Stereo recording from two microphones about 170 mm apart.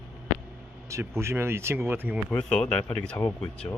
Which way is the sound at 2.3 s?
5° left (ahead or behind).